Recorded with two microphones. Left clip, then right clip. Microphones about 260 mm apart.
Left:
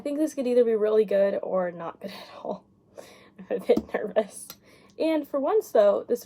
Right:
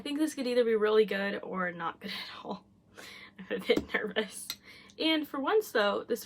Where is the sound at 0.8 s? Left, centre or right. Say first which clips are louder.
Left 6 dB; centre.